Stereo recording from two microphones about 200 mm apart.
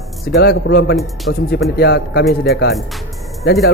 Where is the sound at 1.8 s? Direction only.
50° left (ahead or behind).